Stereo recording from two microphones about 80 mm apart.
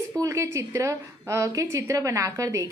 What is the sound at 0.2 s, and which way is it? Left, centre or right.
A woman's voice, right.